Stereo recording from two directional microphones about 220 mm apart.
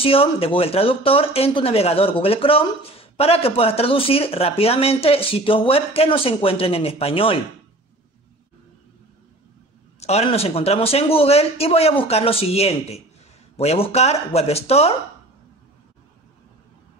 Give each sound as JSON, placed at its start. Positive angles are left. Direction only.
{"t": 0.0, "sound": "speech", "side_deg": 25}
{"t": 9.9, "sound": "speech", "side_deg": 30}